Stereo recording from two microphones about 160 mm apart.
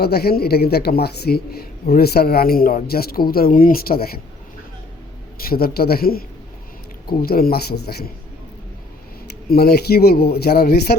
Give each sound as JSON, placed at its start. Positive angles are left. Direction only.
{"t": 0.0, "sound": "speech", "side_deg": 80}
{"t": 5.5, "sound": "speech", "side_deg": 75}
{"t": 9.5, "sound": "speech", "side_deg": 75}